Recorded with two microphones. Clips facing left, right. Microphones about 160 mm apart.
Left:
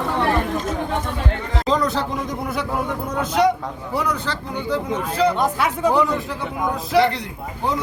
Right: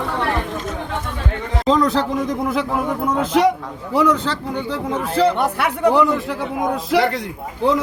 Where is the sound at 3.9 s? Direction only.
90° right.